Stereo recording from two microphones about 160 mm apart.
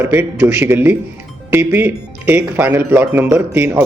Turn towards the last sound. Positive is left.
turn(degrees=-15)  # may be behind; listen again after turning